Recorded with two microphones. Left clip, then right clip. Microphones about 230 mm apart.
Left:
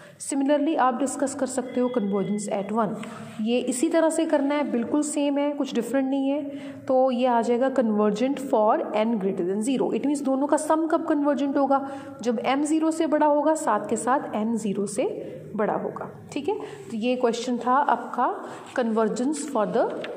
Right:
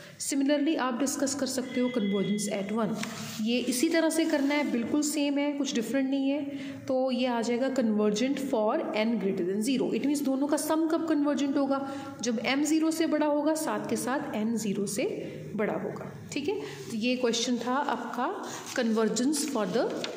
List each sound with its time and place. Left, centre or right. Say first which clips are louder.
0.3 s a woman's voice: left 4 dB; centre